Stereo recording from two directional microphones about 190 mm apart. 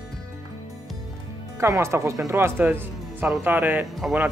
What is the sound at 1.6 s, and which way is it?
Speech, 15° right (ahead or behind).